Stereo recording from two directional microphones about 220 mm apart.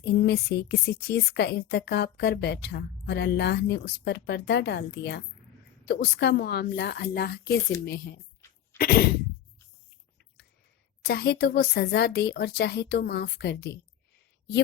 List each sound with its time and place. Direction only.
0.0 s a woman's voice: 50° left (ahead or behind)
11.0 s a woman's voice: 45° left (ahead or behind)